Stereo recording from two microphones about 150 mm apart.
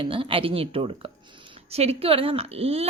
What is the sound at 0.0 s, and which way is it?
A woman's voice, 35° right (ahead or behind).